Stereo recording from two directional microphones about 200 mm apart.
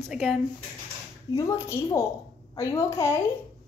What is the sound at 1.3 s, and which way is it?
A woman's voice, 15° left (ahead or behind).